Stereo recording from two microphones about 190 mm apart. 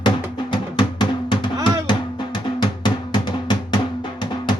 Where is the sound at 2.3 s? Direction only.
25° left (ahead or behind).